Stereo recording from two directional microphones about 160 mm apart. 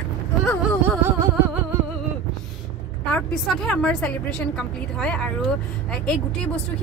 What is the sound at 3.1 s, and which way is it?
A woman's voice, 5° left (ahead or behind).